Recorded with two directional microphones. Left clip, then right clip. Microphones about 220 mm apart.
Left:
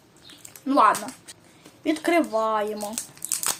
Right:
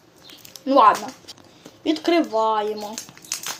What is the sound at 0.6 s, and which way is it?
Speech, 25° left (ahead or behind).